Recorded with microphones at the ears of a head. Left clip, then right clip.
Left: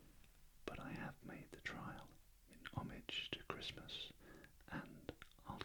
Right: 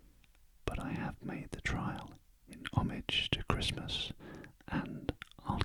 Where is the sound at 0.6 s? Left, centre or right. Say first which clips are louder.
Right 10 dB; right.